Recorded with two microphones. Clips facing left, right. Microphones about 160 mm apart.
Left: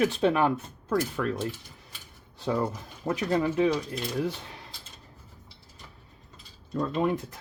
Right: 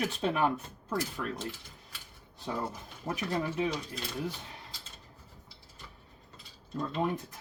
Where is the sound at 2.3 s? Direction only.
90° left.